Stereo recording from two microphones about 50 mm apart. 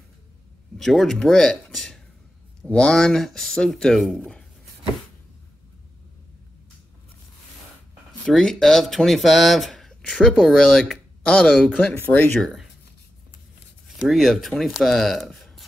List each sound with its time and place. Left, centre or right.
0.7 s speech: centre
8.3 s speech: centre
10.0 s speech: centre
12.0 s speech: left
13.8 s speech: centre